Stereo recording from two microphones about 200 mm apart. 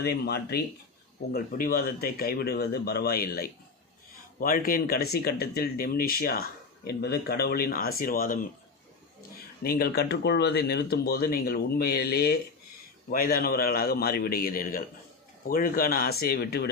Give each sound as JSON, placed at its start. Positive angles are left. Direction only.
{"t": 0.0, "sound": "speech", "side_deg": 50}
{"t": 9.6, "sound": "speech", "side_deg": 50}